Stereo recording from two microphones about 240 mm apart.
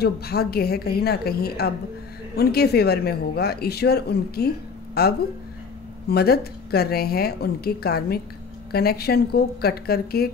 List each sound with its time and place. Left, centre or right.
0.0 s a woman's voice: left